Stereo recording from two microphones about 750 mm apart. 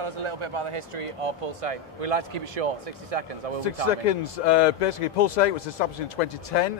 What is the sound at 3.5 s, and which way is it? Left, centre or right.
Speech, left.